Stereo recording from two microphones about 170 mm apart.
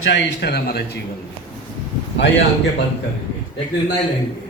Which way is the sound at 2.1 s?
90° left.